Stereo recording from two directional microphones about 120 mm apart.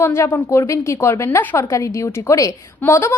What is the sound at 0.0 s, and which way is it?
A woman's voice, 20° left (ahead or behind).